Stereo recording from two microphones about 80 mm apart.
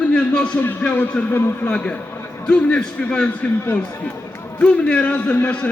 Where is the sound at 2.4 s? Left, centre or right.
Centre.